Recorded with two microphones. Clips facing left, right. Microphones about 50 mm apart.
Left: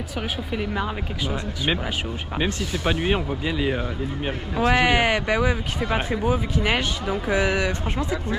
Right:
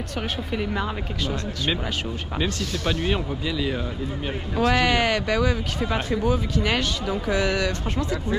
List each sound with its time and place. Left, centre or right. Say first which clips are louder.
0.2 s speech: even; centre